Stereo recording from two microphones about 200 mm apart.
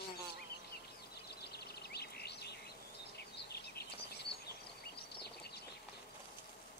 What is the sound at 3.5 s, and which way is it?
Bird, 55° left (ahead or behind).